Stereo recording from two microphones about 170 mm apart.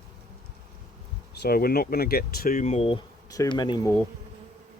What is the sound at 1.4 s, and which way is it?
Speech, 65° left (ahead or behind).